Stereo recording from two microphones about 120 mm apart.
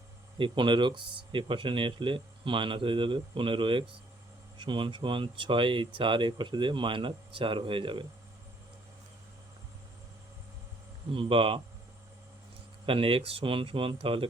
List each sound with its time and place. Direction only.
0.3 s speech: 45° right (ahead or behind)
11.1 s speech: 50° right (ahead or behind)
12.8 s speech: 50° right (ahead or behind)